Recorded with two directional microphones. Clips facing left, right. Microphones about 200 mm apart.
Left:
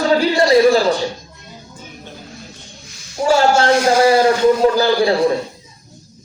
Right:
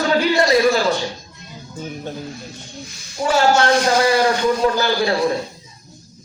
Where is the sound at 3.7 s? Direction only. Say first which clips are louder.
Left 3 dB; 10° left (ahead or behind).